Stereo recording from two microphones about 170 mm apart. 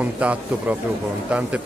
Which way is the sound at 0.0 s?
10° right (ahead or behind).